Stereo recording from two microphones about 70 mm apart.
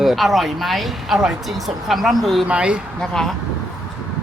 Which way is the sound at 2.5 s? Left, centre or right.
Centre.